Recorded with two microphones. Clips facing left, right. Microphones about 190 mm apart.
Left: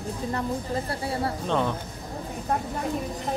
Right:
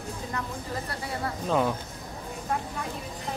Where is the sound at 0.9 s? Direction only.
30° left (ahead or behind).